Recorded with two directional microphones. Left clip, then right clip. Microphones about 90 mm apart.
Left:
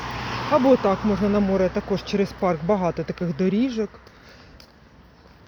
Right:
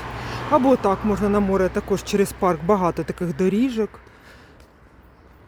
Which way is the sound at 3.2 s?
70° right (ahead or behind).